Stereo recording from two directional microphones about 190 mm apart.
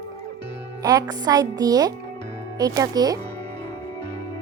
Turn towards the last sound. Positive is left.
turn(degrees=-20)  # may be behind; listen again after turning